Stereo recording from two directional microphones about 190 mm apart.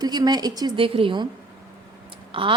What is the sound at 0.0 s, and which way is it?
A woman's voice, 20° right (ahead or behind).